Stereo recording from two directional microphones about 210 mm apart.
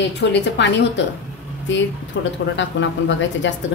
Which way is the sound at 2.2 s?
60° left (ahead or behind).